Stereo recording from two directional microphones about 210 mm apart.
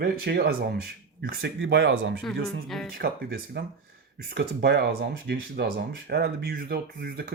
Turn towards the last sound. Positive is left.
turn(degrees=-45)  # may be behind; listen again after turning